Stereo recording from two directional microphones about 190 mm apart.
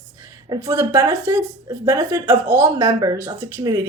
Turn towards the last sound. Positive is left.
turn(degrees=-15)  # may be behind; listen again after turning